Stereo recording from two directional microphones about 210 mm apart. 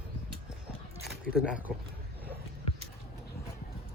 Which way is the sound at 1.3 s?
5° right (ahead or behind).